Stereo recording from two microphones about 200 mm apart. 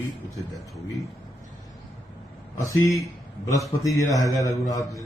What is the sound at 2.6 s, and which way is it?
A man's voice, 15° left (ahead or behind).